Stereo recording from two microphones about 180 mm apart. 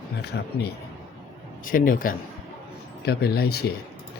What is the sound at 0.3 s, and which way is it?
Speech, 70° left (ahead or behind).